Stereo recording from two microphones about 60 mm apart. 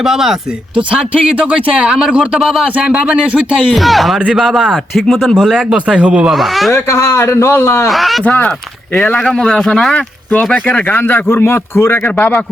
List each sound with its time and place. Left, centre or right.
0.0 s speech: centre
0.9 s speech: right
3.8 s speech: centre
5.7 s speech: centre
6.3 s speech: centre
6.7 s a man's voice: left
7.9 s speech: centre
8.2 s speech: left
9.2 s speech: centre
9.9 s speech: left
11.3 s a man's voice: left
12.0 s speech: left